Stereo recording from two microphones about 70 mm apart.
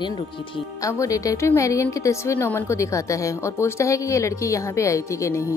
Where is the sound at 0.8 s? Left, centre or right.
Left.